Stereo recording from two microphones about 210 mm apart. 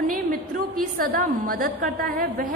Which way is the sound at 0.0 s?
40° right (ahead or behind).